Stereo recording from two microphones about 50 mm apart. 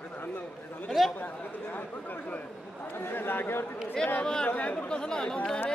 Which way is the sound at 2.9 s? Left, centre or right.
Left.